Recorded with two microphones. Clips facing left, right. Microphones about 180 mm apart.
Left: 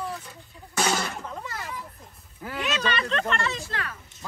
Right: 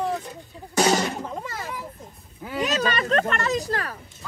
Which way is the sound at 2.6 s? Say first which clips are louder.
Right 4 dB; 40° right (ahead or behind).